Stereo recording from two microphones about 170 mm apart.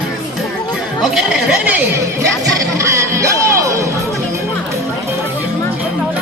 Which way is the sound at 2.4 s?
20° right (ahead or behind).